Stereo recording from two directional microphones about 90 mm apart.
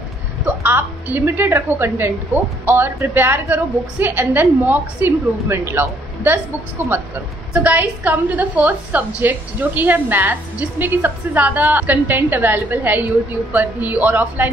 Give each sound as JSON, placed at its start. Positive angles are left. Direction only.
{"t": 0.5, "sound": "music", "side_deg": -20}
{"t": 1.1, "sound": "a woman's voice", "side_deg": -20}